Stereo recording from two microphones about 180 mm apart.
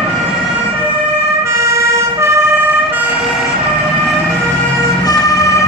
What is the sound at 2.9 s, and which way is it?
Emergency vehicle, 5° right (ahead or behind).